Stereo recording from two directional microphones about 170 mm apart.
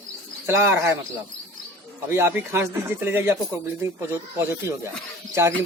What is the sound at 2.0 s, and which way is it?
Speech, 15° right (ahead or behind).